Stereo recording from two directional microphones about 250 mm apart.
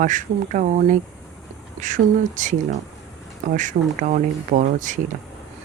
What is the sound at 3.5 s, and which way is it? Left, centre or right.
Speech, right.